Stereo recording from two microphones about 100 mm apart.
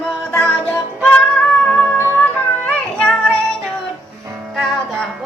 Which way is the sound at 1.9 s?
25° left (ahead or behind).